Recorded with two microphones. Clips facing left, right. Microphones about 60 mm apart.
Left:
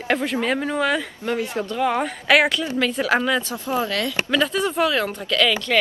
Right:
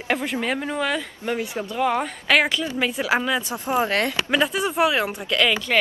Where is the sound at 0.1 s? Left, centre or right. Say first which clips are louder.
Left 2 dB; centre.